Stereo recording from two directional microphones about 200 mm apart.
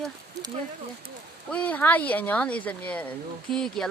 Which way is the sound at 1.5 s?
5° left (ahead or behind).